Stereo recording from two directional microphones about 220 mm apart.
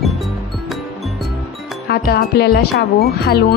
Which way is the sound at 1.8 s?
45° left (ahead or behind).